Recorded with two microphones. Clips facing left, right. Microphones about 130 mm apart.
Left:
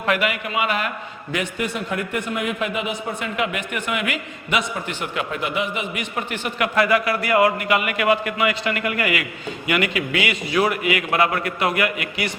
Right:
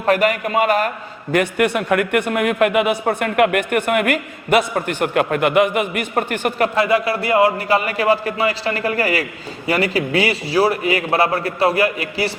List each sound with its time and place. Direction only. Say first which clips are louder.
0.0 s a man's voice: right 6 dB; 40° right (ahead or behind)
1.3 s speech: right 8 dB; 60° right (ahead or behind)
6.7 s a man's voice: right 2 dB; 25° right (ahead or behind)